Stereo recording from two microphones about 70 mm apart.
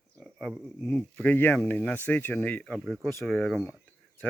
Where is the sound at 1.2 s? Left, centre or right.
Left.